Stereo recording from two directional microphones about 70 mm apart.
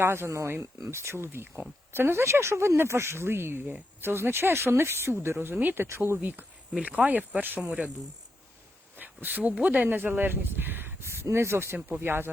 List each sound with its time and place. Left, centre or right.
0.0 s speech: right
6.8 s speech: right
9.0 s speech: right